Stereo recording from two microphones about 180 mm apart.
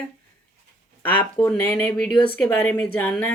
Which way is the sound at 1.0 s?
10° left (ahead or behind).